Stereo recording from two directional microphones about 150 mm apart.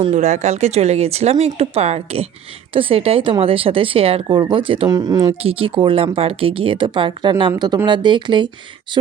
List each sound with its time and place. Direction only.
0.1 s speech: 50° right (ahead or behind)
4.9 s speech: 25° right (ahead or behind)
5.4 s speech: 40° right (ahead or behind)